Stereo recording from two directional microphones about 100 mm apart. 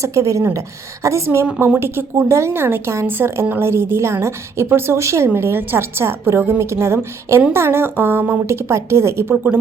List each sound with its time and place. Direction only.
0.0 s a woman's voice: 30° right (ahead or behind)